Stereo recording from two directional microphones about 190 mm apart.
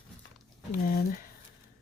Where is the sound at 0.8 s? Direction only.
50° left (ahead or behind).